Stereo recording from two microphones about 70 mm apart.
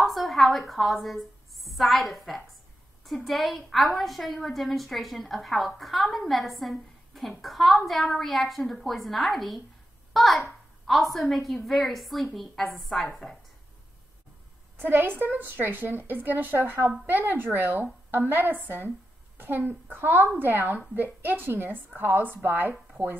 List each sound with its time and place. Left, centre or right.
0.0 s a woman's voice: centre
14.8 s a woman's voice: right